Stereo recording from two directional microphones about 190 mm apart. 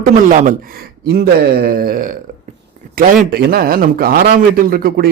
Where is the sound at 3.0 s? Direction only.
45° right (ahead or behind).